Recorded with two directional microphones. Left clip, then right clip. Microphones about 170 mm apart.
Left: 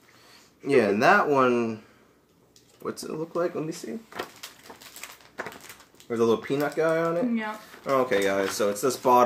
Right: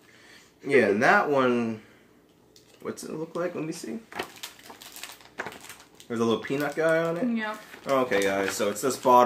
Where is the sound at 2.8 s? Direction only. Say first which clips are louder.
Left 2 dB; 20° left (ahead or behind).